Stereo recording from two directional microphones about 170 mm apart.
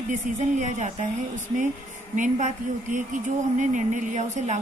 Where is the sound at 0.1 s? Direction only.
45° right (ahead or behind).